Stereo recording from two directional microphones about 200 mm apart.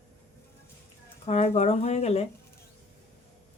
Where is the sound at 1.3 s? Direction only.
30° left (ahead or behind).